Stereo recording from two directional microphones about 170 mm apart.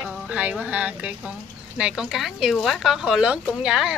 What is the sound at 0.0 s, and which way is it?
Music, 5° right (ahead or behind).